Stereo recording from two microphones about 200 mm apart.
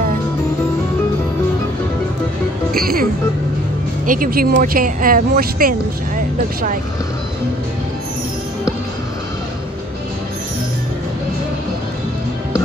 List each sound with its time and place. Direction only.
2.7 s music: 50° right (ahead or behind)
4.0 s speech: 45° right (ahead or behind)